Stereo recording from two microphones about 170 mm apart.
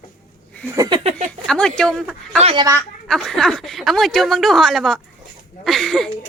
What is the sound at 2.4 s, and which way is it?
Speech, 35° right (ahead or behind).